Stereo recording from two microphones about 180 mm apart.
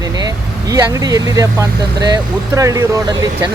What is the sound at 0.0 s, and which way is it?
Speech, 20° right (ahead or behind).